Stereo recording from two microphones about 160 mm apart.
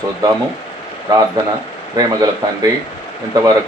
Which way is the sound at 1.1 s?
25° right (ahead or behind).